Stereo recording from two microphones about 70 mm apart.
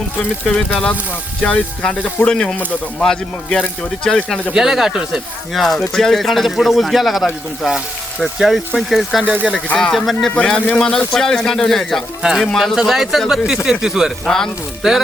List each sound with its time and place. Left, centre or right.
1.4 s speech: centre
4.5 s speech: centre
5.5 s speech: centre
8.4 s speech: centre
9.2 s speech: right
9.7 s speech: centre
12.2 s speech: centre
14.3 s speech: centre
14.8 s speech: centre